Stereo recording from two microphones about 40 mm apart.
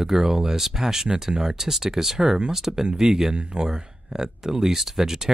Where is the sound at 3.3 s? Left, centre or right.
Right.